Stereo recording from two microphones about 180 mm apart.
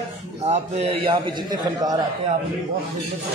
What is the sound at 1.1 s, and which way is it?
Speech, 20° right (ahead or behind).